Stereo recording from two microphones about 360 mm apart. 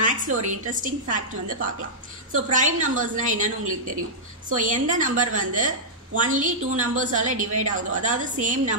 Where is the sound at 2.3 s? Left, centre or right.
Right.